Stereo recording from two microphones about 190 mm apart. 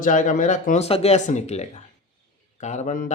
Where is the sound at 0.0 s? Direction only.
40° left (ahead or behind).